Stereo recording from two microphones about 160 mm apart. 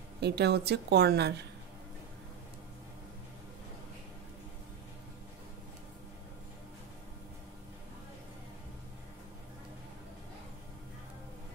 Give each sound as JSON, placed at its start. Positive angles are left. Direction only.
{"t": 0.2, "sound": "a woman's voice", "side_deg": -90}